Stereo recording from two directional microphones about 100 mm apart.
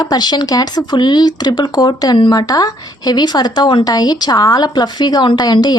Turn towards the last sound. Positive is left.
turn(degrees=40)  # may be behind; listen again after turning